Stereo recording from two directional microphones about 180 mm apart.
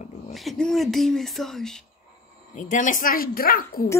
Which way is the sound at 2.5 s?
45° left (ahead or behind).